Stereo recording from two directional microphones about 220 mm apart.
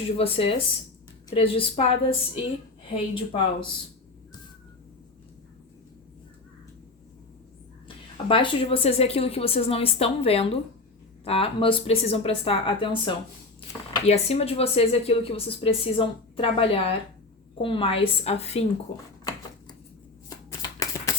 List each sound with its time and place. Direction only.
0.2 s a woman's voice: 25° left (ahead or behind)
8.3 s a woman's voice: 25° left (ahead or behind)
20.5 s shuffling cards: 15° left (ahead or behind)